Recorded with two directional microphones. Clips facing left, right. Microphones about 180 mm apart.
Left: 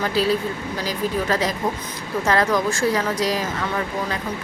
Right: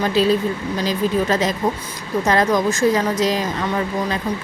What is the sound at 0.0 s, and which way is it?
A woman's voice, 20° right (ahead or behind).